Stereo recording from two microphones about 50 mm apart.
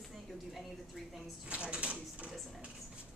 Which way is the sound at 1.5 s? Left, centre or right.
Right.